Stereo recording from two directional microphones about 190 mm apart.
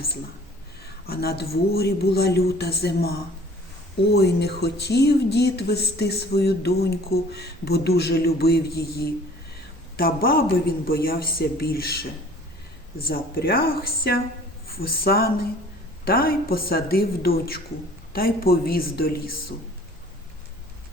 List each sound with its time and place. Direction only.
1.0 s a woman's voice: 55° left (ahead or behind)